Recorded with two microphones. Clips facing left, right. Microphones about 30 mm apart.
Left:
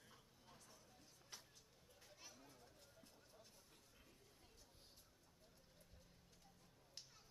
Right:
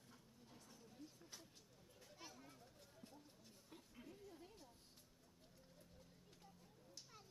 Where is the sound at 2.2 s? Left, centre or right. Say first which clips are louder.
Right 5 dB; centre.